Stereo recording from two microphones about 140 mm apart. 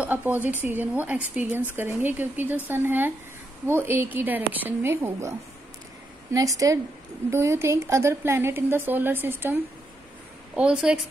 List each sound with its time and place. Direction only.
0.0 s speech: 15° right (ahead or behind)
6.3 s a woman's voice: 25° right (ahead or behind); by 11.0 s 5° right (ahead or behind)